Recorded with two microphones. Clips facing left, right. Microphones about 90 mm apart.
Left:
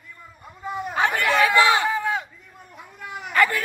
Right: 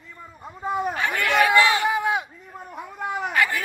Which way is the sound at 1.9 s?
15° right (ahead or behind).